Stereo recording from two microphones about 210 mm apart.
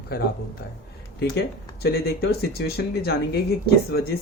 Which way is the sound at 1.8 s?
50° left (ahead or behind).